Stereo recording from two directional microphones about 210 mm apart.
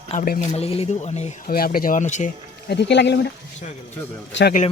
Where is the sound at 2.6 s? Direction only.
55° left (ahead or behind).